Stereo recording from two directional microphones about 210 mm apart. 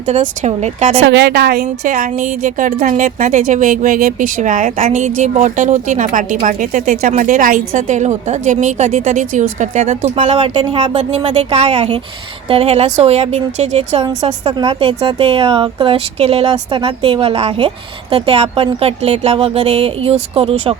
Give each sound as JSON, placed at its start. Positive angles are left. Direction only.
{"t": 0.0, "sound": "speech", "side_deg": -30}
{"t": 1.0, "sound": "a woman's voice", "side_deg": -55}